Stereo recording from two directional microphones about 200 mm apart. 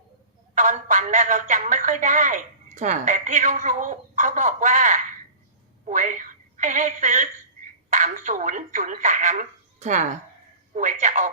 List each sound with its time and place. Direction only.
0.5 s a woman's voice: 40° right (ahead or behind)